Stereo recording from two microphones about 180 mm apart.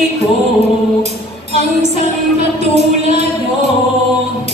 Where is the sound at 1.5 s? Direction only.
40° right (ahead or behind).